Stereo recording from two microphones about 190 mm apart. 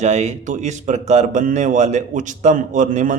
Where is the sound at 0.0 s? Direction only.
35° right (ahead or behind).